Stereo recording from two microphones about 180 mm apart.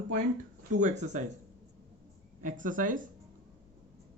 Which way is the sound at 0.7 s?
45° right (ahead or behind).